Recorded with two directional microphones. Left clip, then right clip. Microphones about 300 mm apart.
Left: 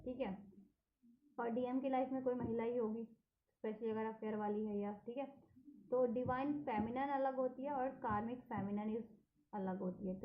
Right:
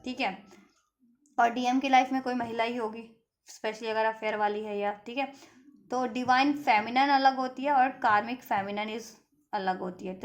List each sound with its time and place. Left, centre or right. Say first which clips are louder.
1.4 s a woman's voice: right 15 dB; right